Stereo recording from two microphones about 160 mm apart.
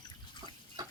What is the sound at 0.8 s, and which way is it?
Stir, 25° right (ahead or behind).